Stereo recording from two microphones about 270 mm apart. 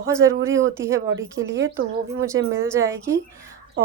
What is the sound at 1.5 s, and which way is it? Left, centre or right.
Speech, right.